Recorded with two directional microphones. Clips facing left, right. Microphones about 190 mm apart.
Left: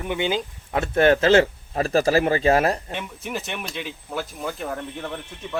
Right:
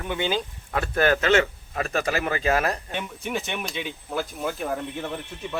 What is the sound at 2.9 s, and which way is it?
Speech, centre (ahead or behind).